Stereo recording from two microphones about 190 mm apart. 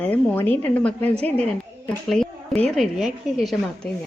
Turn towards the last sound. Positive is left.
turn(degrees=0)  # may be behind; listen again after turning